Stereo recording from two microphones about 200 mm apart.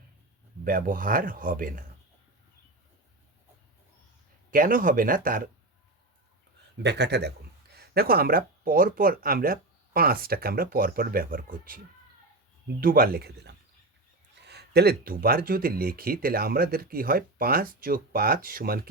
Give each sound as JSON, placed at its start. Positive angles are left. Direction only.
{"t": 0.6, "sound": "speech", "side_deg": -45}
{"t": 4.5, "sound": "speech", "side_deg": -45}
{"t": 6.8, "sound": "speech", "side_deg": -55}